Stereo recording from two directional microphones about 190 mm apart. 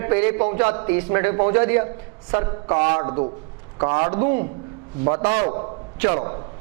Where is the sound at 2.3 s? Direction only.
20° right (ahead or behind).